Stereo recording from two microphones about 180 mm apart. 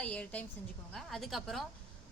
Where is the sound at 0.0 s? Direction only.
5° left (ahead or behind).